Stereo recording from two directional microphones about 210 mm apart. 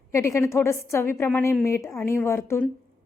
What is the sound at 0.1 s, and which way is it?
A woman's voice, 15° left (ahead or behind).